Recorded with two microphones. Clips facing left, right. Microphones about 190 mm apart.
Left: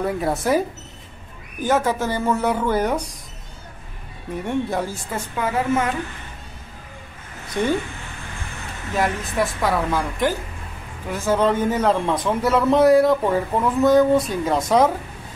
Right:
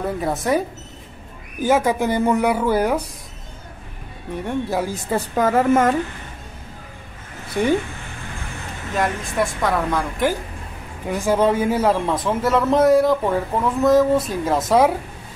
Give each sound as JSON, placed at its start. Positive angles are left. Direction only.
{"t": 0.0, "sound": "a man's voice", "side_deg": 0}
{"t": 1.6, "sound": "a woman's voice", "side_deg": -10}
{"t": 4.5, "sound": "a man's voice", "side_deg": 0}
{"t": 5.1, "sound": "a woman's voice", "side_deg": -40}
{"t": 7.6, "sound": "a woman's voice", "side_deg": -10}
{"t": 8.9, "sound": "a man's voice", "side_deg": 5}
{"t": 11.1, "sound": "a man's voice", "side_deg": -15}